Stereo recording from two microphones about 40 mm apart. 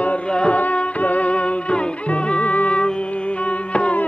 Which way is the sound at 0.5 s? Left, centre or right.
Left.